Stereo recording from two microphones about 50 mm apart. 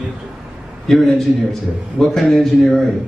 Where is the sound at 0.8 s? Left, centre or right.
Centre.